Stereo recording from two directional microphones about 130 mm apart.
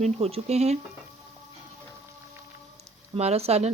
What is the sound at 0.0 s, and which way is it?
Speech, 50° right (ahead or behind).